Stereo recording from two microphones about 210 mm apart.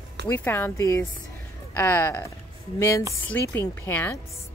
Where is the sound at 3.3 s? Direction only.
10° left (ahead or behind).